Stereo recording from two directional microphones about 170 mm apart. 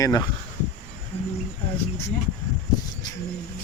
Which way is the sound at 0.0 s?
20° left (ahead or behind).